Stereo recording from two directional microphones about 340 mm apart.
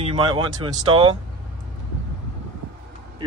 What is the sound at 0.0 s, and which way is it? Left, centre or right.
Speech, centre.